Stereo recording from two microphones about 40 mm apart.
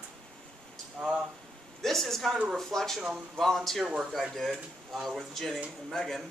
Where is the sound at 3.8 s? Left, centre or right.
Right.